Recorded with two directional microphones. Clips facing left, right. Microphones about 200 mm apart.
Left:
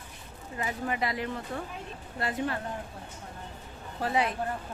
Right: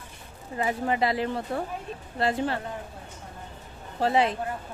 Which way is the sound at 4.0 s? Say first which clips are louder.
Right 5 dB; 30° right (ahead or behind).